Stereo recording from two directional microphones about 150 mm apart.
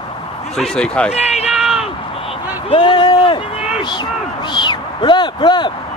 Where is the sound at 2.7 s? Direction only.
35° left (ahead or behind).